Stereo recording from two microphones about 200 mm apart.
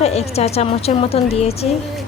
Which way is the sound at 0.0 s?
30° left (ahead or behind).